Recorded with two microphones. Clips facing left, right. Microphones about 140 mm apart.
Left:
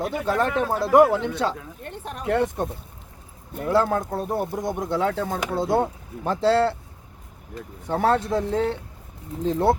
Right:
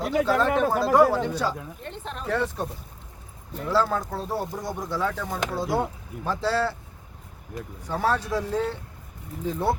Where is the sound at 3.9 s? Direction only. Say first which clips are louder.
Left 3 dB; 20° left (ahead or behind).